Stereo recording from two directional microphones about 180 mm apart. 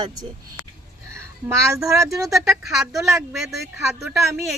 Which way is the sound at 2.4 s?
Centre (ahead or behind).